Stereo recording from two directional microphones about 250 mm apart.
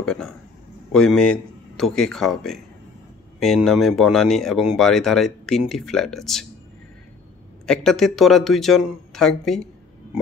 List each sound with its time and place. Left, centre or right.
0.0 s speech: centre
7.6 s speech: centre